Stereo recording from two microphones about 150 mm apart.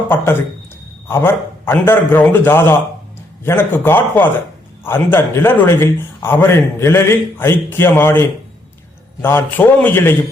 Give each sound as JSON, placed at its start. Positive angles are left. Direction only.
{"t": 0.1, "sound": "speech", "side_deg": 15}